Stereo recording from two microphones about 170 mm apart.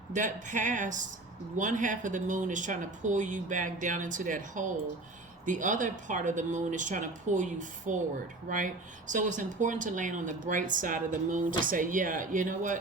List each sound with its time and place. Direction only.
0.1 s speech: 45° right (ahead or behind)